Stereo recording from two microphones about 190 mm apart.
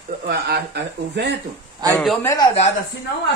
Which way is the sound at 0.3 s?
60° right (ahead or behind).